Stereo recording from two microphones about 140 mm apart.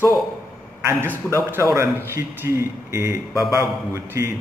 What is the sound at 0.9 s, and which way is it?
A man's voice, 15° right (ahead or behind).